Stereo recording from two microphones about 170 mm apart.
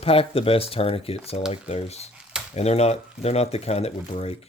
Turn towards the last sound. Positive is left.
turn(degrees=35)  # may be behind; listen again after turning